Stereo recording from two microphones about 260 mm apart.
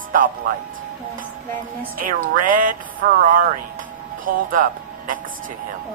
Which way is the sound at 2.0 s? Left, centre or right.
Right.